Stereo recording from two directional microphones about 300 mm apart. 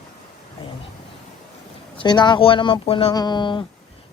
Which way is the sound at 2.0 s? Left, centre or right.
Centre.